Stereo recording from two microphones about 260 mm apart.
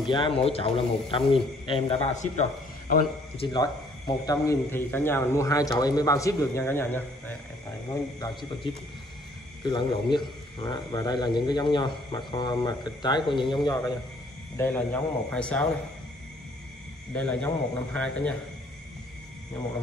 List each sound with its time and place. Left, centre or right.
0.1 s a man's voice: centre
14.6 s a man's voice: centre
17.1 s a man's voice: centre